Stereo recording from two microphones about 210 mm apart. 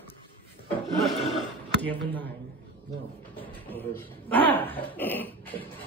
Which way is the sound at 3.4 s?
10° left (ahead or behind).